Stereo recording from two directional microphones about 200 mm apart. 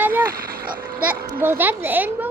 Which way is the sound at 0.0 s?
10° right (ahead or behind).